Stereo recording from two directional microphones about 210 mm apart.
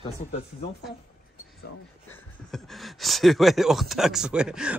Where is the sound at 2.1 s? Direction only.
Centre (ahead or behind).